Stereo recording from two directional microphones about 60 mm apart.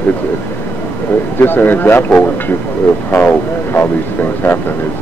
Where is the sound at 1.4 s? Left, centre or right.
Left.